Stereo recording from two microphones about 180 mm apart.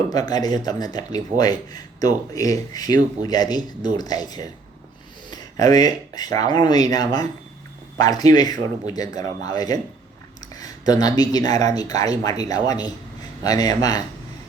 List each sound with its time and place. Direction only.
0.1 s speech: 20° left (ahead or behind)